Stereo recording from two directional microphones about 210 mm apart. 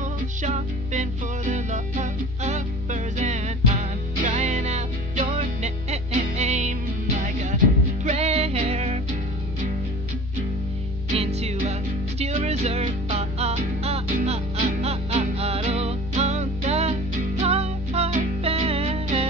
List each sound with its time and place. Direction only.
0.4 s music: 35° right (ahead or behind)
11.1 s music: 30° right (ahead or behind)